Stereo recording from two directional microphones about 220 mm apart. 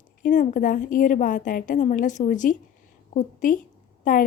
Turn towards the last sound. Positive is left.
turn(degrees=40)  # may be behind; listen again after turning